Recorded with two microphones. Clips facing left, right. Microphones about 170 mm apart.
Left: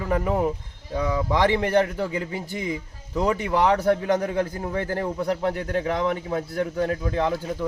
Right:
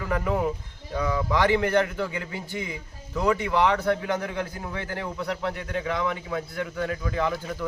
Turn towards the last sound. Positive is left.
turn(degrees=25)  # may be behind; listen again after turning